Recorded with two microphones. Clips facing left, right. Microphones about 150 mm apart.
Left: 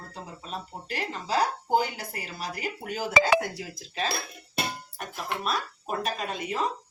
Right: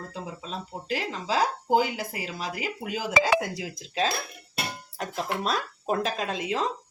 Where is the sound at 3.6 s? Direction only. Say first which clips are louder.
Right 4 dB; 90° right.